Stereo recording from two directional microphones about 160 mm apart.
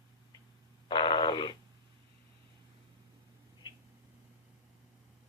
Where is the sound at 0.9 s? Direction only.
30° left (ahead or behind).